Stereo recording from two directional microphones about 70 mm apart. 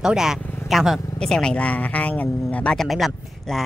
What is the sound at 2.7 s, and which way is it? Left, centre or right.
Speech, centre.